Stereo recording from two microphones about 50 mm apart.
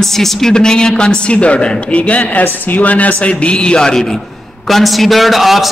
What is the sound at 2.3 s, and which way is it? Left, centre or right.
A man's voice, left.